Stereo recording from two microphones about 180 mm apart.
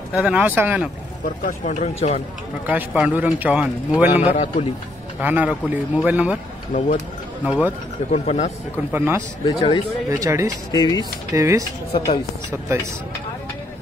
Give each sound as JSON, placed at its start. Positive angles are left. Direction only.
{"t": 0.1, "sound": "a man's voice", "side_deg": -5}
{"t": 1.2, "sound": "speech", "side_deg": 45}
{"t": 2.6, "sound": "a man's voice", "side_deg": -5}
{"t": 4.2, "sound": "a man's voice", "side_deg": 40}
{"t": 5.2, "sound": "a man's voice", "side_deg": -10}
{"t": 7.4, "sound": "speech", "side_deg": -5}
{"t": 8.1, "sound": "a man's voice", "side_deg": 35}
{"t": 8.7, "sound": "a man's voice", "side_deg": -10}
{"t": 9.5, "sound": "speech", "side_deg": 25}
{"t": 10.0, "sound": "a man's voice", "side_deg": -15}
{"t": 10.7, "sound": "speech", "side_deg": 20}
{"t": 11.3, "sound": "a man's voice", "side_deg": -20}
{"t": 11.9, "sound": "speech", "side_deg": 25}